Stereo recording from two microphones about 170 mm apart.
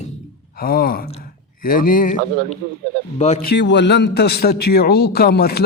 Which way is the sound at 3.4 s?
80° left.